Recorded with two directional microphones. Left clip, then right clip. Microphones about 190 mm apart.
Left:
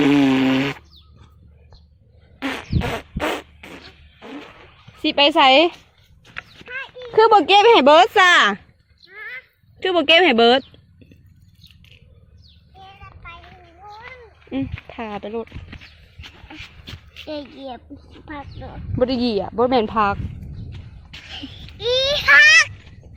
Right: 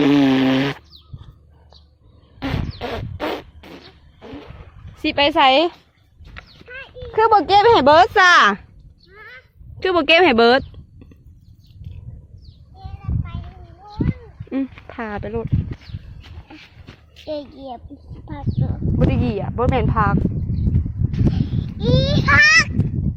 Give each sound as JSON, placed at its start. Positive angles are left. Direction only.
{"t": 0.0, "sound": "fart", "side_deg": -10}
{"t": 2.4, "sound": "a sound", "side_deg": -15}
{"t": 5.0, "sound": "speech", "side_deg": 10}
{"t": 6.2, "sound": "clip-clop", "side_deg": -15}
{"t": 7.1, "sound": "speech", "side_deg": 20}
{"t": 9.0, "sound": "horse", "side_deg": -50}
{"t": 9.8, "sound": "speech", "side_deg": -10}
{"t": 13.0, "sound": "a sound", "side_deg": -25}
{"t": 14.5, "sound": "speech", "side_deg": -15}
{"t": 16.5, "sound": "a sound", "side_deg": -5}
{"t": 17.2, "sound": "a child's voice", "side_deg": -20}
{"t": 19.4, "sound": "speech", "side_deg": 20}
{"t": 21.1, "sound": "a sound", "side_deg": -10}
{"t": 21.8, "sound": "a child's voice", "side_deg": 0}